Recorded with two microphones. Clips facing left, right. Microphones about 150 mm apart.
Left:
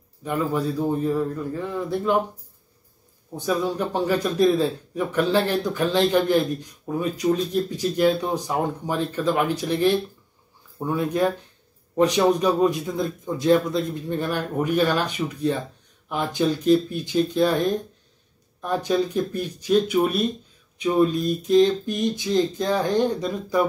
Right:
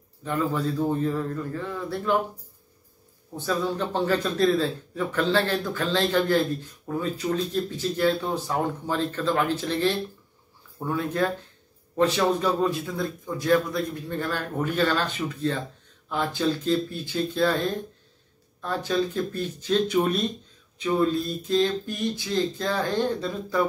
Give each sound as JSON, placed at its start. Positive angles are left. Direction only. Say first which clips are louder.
{"t": 0.2, "sound": "a man's voice", "louder": "left 2 dB", "side_deg": 15}
{"t": 3.3, "sound": "a man's voice", "louder": "left 3 dB", "side_deg": 15}